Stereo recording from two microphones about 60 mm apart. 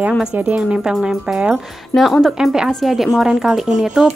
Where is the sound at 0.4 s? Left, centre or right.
Right.